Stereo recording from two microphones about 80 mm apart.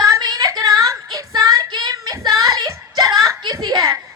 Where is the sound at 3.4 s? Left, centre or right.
Right.